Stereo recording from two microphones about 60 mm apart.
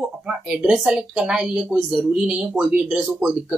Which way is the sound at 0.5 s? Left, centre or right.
Centre.